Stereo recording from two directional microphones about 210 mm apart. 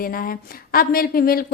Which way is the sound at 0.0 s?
45° left (ahead or behind).